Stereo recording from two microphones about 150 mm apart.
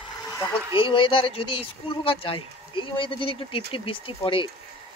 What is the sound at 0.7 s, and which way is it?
Speech, 35° left (ahead or behind).